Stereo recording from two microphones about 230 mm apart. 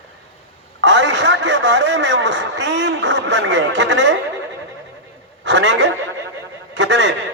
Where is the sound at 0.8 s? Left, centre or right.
Right.